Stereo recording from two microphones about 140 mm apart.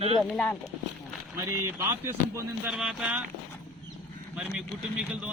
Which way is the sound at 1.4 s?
20° right (ahead or behind).